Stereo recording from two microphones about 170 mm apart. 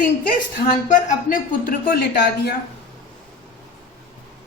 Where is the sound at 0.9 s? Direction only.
50° left (ahead or behind); by 2.6 s 70° left (ahead or behind).